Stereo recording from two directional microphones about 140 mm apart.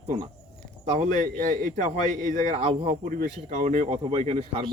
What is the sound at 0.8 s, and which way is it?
A man's voice, 55° right (ahead or behind).